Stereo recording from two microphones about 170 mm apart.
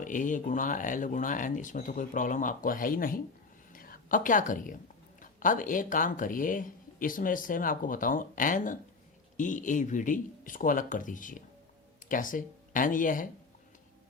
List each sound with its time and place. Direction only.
0.0 s speech: 50° left (ahead or behind)
3.7 s whispering: 55° left (ahead or behind)
5.2 s speech: 50° left (ahead or behind)